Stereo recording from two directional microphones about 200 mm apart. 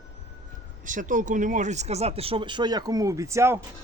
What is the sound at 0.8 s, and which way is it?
A woman's voice, 40° right (ahead or behind).